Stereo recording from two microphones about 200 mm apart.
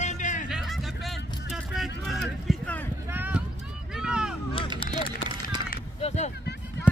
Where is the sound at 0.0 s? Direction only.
35° left (ahead or behind).